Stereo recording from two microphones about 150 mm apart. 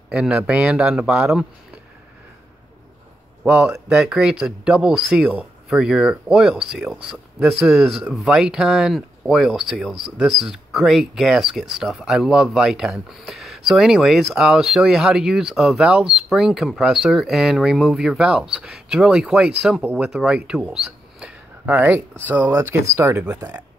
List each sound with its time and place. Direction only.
0.1 s speech: 5° right (ahead or behind)
3.4 s speech: 5° right (ahead or behind)